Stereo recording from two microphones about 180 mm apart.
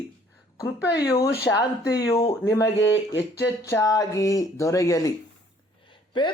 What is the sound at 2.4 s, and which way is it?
Speech, 15° left (ahead or behind).